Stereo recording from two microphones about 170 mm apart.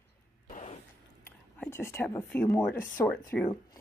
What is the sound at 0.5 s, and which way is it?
Vehicle, 45° left (ahead or behind).